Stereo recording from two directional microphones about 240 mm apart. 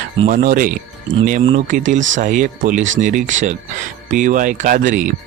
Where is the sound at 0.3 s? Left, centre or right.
Right.